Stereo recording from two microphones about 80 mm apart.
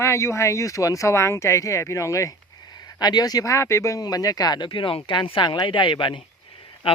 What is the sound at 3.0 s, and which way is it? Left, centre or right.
Speech, left.